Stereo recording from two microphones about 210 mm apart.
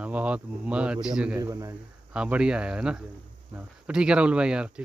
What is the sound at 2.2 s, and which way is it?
Speech, 5° right (ahead or behind).